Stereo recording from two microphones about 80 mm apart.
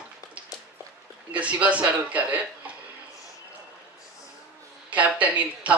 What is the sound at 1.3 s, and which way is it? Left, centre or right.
Speech, centre.